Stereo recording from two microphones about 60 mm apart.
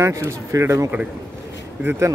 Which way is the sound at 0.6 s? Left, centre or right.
Right.